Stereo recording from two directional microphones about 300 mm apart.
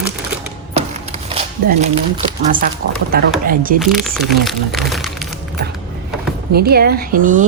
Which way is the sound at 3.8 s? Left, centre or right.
Centre.